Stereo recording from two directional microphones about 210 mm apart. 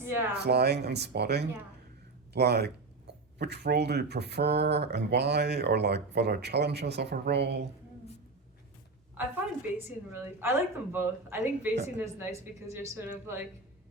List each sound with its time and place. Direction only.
0.0 s speech: 10° right (ahead or behind)
0.3 s speech: 50° right (ahead or behind)
9.7 s a woman's voice: 10° right (ahead or behind)